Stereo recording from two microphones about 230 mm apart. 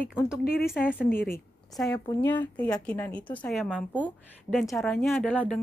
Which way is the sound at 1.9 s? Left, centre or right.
Centre.